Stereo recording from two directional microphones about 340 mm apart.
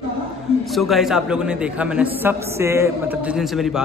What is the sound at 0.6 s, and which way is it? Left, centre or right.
A man's voice, centre.